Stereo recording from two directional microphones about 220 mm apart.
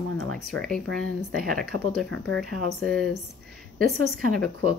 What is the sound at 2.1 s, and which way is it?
Speech, 65° right (ahead or behind).